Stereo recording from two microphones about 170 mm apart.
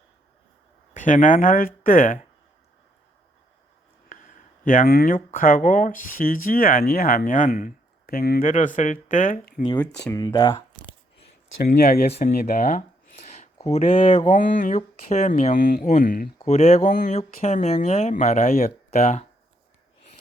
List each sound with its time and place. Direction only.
0.9 s speech: 50° left (ahead or behind)
4.6 s speech: 55° left (ahead or behind)
10.1 s speech: 25° left (ahead or behind)
11.6 s speech: 60° left (ahead or behind)
13.2 s a sound: 40° left (ahead or behind)
13.7 s speech: 45° left (ahead or behind)
16.5 s speech: 40° left (ahead or behind)